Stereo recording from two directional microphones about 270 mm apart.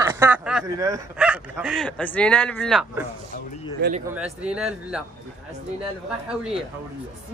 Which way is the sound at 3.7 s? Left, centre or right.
Right.